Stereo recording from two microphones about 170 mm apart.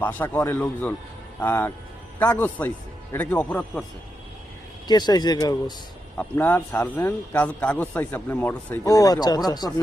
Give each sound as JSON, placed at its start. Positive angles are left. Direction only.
{"t": 0.0, "sound": "a man's voice", "side_deg": 10}
{"t": 4.9, "sound": "speech", "side_deg": 25}
{"t": 6.1, "sound": "a man's voice", "side_deg": 10}